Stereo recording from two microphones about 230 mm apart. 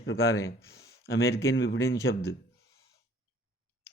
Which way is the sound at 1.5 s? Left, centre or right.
Left.